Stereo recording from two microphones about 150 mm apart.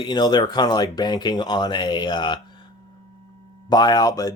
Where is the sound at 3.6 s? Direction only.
25° left (ahead or behind).